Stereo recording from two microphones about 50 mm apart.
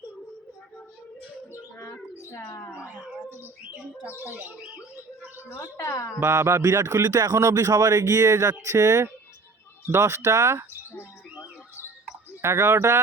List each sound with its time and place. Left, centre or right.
1.8 s bird: left
4.0 s speech: left
4.3 s speech: right
5.5 s a woman's voice: left
6.3 s speech: right
9.8 s speech: right
12.4 s speech: right